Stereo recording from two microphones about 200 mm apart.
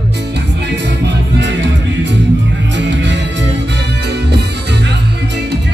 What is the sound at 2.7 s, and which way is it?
Music, 60° right (ahead or behind).